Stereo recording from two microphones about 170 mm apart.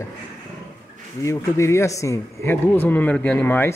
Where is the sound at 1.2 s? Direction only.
15° left (ahead or behind).